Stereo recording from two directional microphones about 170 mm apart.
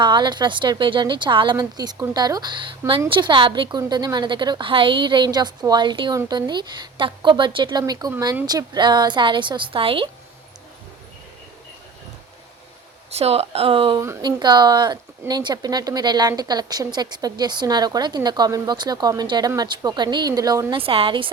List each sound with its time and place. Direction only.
0.0 s speech: 25° right (ahead or behind)
13.1 s speech: 35° right (ahead or behind)
14.0 s speech: 20° right (ahead or behind)